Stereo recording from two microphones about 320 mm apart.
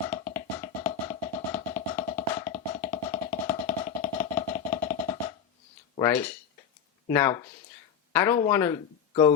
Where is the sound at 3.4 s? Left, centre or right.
Centre.